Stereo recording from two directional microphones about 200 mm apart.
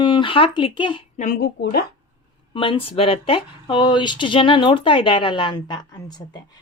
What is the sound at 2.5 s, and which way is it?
Speech, 25° left (ahead or behind).